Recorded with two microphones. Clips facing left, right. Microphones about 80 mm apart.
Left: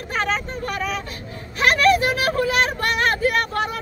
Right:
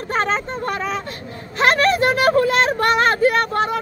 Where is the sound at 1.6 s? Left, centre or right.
Right.